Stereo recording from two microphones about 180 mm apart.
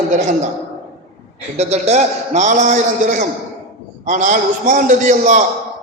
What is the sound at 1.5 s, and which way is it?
A man's voice, 35° right (ahead or behind).